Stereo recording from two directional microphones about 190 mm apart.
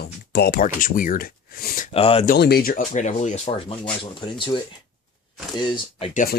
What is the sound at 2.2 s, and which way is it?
Speech, 55° left (ahead or behind).